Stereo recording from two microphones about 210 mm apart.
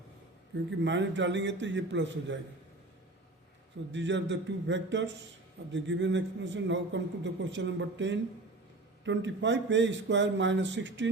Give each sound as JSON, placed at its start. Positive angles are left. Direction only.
{"t": 0.8, "sound": "a man's voice", "side_deg": -60}
{"t": 3.9, "sound": "a man's voice", "side_deg": -60}